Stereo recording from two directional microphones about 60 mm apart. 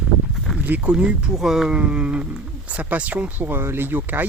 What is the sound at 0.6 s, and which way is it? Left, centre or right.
Speech, right.